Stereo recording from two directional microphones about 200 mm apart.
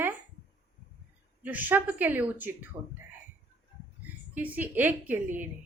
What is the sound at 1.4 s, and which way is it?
A woman's voice, 10° right (ahead or behind).